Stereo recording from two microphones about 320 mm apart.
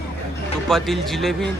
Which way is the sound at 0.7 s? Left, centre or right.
Centre.